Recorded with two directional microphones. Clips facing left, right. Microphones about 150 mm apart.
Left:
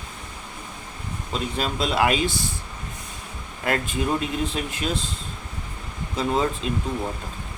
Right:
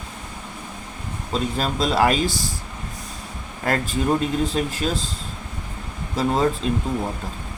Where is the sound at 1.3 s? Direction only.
40° right (ahead or behind).